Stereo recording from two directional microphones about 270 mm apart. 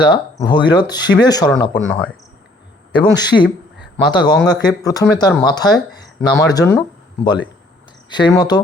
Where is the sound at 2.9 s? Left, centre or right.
Centre.